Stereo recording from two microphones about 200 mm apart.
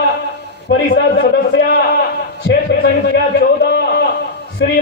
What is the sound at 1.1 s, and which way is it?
A man's voice, 50° left (ahead or behind).